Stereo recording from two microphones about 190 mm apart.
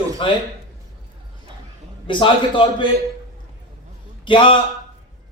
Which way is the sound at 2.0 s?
25° left (ahead or behind).